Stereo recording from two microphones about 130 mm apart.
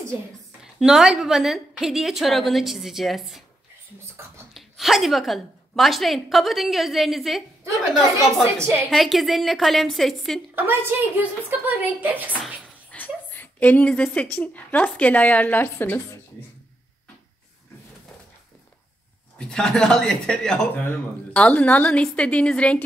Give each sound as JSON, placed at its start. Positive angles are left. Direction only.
{"t": 0.7, "sound": "a woman's voice", "side_deg": -5}
{"t": 4.6, "sound": "a woman's voice", "side_deg": 0}
{"t": 8.5, "sound": "a woman's voice", "side_deg": -20}
{"t": 8.9, "sound": "a woman's voice", "side_deg": 0}
{"t": 10.5, "sound": "a woman's voice", "side_deg": -15}
{"t": 12.9, "sound": "a woman's voice", "side_deg": 15}
{"t": 19.3, "sound": "a woman's voice", "side_deg": 5}